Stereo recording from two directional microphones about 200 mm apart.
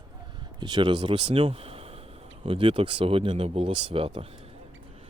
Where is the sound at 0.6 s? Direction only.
20° right (ahead or behind).